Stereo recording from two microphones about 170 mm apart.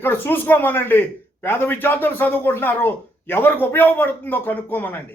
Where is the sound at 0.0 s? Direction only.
10° left (ahead or behind).